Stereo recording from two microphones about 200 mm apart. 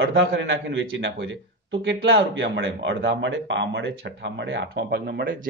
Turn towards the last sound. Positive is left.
turn(degrees=-50)  # may be behind; listen again after turning